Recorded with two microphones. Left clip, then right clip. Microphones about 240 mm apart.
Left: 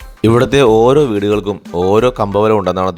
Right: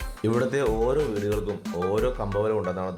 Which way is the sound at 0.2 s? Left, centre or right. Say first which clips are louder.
Left 14 dB; left.